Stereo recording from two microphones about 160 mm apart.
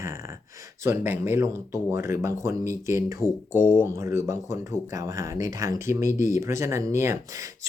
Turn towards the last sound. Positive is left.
turn(degrees=-20)  # may be behind; listen again after turning